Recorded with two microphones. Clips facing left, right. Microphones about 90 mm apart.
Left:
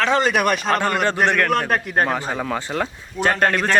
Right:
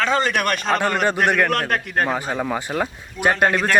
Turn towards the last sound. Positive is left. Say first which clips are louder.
# even
turn(degrees=-5)  # may be behind; listen again after turning